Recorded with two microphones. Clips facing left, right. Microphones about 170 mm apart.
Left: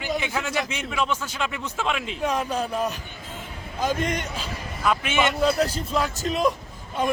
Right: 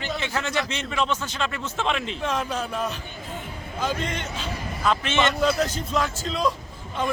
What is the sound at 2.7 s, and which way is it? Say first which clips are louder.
A man's voice: left 2 dB; 35° left (ahead or behind).